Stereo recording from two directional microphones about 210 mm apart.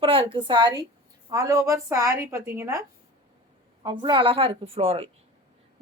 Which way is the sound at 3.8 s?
20° right (ahead or behind).